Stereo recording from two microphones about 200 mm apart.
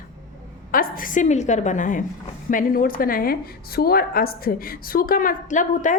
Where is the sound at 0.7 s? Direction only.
45° left (ahead or behind).